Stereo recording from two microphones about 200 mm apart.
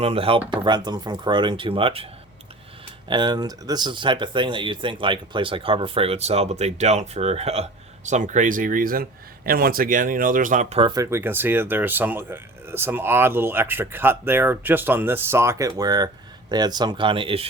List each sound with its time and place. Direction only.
0.0 s speech: 30° right (ahead or behind)
3.1 s speech: 20° right (ahead or behind)